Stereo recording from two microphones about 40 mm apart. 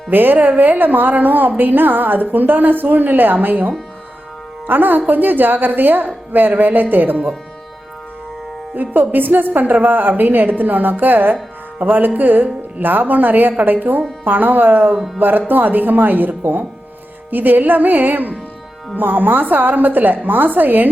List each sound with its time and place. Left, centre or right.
0.1 s a woman's voice: right
4.6 s a woman's voice: right
8.7 s a woman's voice: right